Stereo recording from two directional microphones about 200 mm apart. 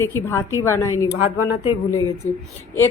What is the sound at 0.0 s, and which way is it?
Speech, 10° left (ahead or behind).